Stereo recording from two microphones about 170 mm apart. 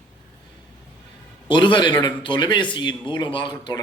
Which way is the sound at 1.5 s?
25° left (ahead or behind).